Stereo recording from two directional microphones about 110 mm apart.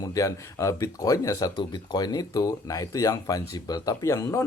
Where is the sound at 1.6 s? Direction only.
40° left (ahead or behind).